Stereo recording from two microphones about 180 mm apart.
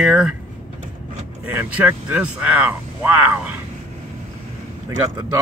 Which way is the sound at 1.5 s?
10° right (ahead or behind).